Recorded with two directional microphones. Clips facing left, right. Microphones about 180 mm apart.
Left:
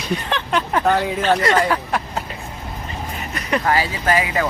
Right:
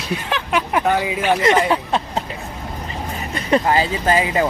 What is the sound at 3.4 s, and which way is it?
Speech, 25° right (ahead or behind).